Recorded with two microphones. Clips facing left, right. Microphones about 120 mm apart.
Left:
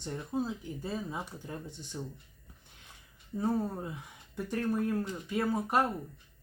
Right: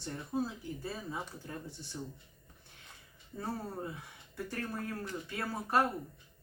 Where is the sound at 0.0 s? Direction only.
20° left (ahead or behind).